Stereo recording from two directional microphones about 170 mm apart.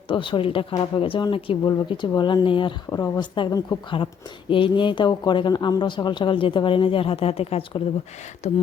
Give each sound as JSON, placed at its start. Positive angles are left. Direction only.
{"t": 0.1, "sound": "speech", "side_deg": 30}